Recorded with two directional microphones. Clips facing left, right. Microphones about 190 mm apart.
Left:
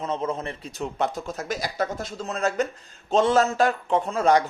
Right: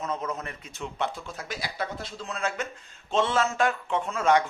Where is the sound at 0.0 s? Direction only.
30° left (ahead or behind).